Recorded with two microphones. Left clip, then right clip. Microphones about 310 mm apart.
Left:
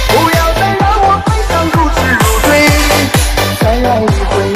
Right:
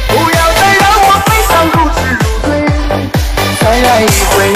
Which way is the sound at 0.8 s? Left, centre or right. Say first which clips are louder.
Right 3 dB; right.